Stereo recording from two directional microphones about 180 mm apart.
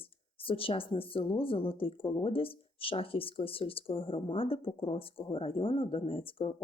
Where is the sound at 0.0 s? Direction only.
30° left (ahead or behind).